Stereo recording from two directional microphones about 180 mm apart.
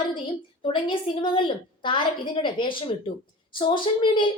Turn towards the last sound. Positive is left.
turn(degrees=25)  # may be behind; listen again after turning